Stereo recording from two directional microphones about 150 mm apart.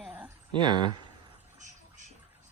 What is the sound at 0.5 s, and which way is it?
Speech, 30° right (ahead or behind).